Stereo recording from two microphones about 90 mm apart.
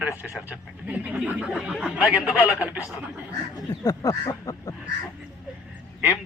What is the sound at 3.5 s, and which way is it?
Speech, 45° left (ahead or behind).